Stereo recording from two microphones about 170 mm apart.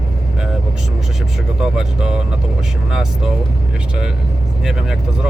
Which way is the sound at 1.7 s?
5° right (ahead or behind).